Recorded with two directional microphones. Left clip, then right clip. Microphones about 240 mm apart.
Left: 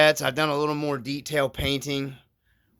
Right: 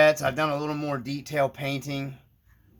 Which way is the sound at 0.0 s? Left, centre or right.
Left.